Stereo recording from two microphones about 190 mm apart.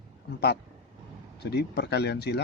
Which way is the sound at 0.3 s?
55° left (ahead or behind).